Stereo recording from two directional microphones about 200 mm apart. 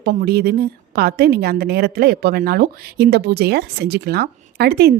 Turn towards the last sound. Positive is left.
turn(degrees=-50)  # may be behind; listen again after turning